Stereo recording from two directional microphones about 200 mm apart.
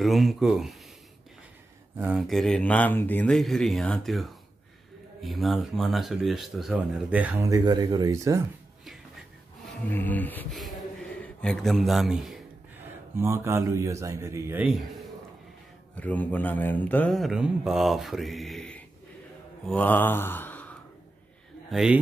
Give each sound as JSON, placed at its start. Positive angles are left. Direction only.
{"t": 0.0, "sound": "speech", "side_deg": 0}
{"t": 2.0, "sound": "speech", "side_deg": -5}
{"t": 9.8, "sound": "speech", "side_deg": 10}
{"t": 11.2, "sound": "a sound", "side_deg": 5}
{"t": 13.1, "sound": "speech", "side_deg": -15}
{"t": 19.6, "sound": "mantra", "side_deg": 10}
{"t": 21.6, "sound": "speech", "side_deg": 0}